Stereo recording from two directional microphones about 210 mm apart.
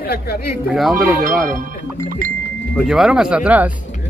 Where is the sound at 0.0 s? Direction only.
45° left (ahead or behind).